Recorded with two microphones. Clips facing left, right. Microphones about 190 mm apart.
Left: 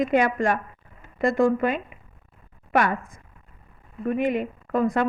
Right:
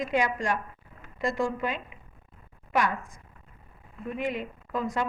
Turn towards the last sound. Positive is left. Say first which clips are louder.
# left 7 dB
turn(degrees=55)  # may be behind; listen again after turning